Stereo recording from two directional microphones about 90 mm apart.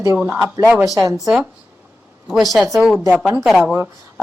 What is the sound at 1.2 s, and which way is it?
Speech, 5° right (ahead or behind).